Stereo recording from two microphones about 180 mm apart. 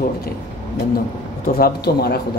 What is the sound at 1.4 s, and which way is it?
Speech, 55° left (ahead or behind).